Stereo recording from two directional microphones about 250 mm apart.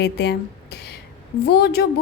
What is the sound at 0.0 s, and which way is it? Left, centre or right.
Speech, left.